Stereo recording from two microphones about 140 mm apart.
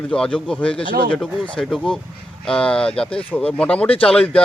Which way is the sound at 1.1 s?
5° left (ahead or behind).